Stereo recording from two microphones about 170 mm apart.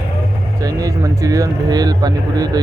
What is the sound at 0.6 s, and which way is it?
Speech, 20° right (ahead or behind).